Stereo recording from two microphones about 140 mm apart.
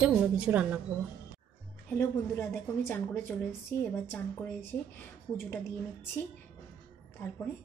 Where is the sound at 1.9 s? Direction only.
20° left (ahead or behind).